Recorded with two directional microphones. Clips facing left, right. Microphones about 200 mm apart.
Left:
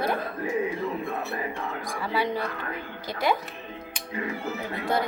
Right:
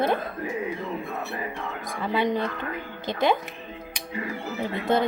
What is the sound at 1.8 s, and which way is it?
A woman's voice, 20° right (ahead or behind).